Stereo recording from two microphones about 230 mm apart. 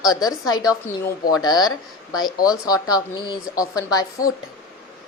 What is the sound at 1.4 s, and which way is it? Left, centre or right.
Speech, centre.